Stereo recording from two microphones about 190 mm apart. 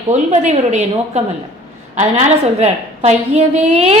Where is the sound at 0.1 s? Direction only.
35° right (ahead or behind).